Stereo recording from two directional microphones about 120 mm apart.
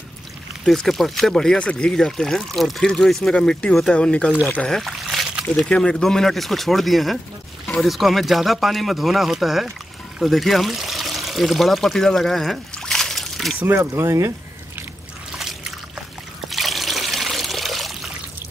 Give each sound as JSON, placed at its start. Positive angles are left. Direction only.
{"t": 0.7, "sound": "speech", "side_deg": 0}
{"t": 13.6, "sound": "speech", "side_deg": -20}
{"t": 16.5, "sound": "trickle", "side_deg": 0}